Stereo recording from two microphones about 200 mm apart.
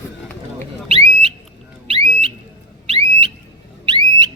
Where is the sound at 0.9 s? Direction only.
30° right (ahead or behind).